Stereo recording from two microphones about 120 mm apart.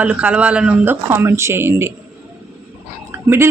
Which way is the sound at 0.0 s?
10° right (ahead or behind).